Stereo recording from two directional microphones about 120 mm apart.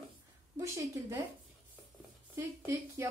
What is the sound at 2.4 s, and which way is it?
Speech, 20° right (ahead or behind).